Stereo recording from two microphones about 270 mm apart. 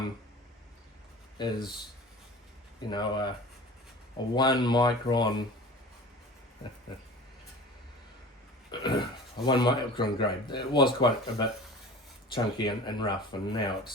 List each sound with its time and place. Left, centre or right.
1.4 s speech: centre
2.9 s speech: centre
4.4 s speech: centre
8.7 s speech: centre